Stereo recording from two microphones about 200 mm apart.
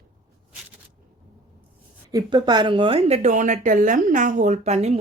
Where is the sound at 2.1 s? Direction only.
20° right (ahead or behind).